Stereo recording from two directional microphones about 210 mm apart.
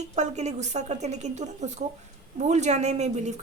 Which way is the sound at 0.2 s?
30° right (ahead or behind).